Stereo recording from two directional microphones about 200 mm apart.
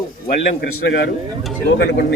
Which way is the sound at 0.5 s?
55° left (ahead or behind).